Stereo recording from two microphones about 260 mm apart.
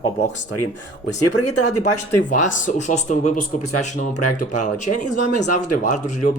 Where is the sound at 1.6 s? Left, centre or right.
Left.